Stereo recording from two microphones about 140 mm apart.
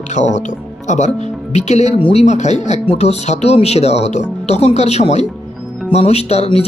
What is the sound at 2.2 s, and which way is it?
Speech, 55° left (ahead or behind).